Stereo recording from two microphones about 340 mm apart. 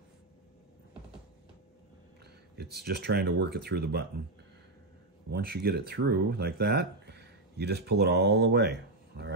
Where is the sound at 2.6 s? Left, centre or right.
Right.